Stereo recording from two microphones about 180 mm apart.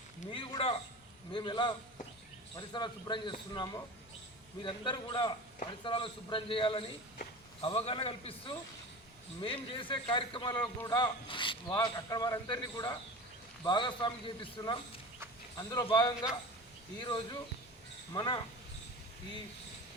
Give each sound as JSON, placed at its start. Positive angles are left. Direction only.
{"t": 0.3, "sound": "a man's voice", "side_deg": 30}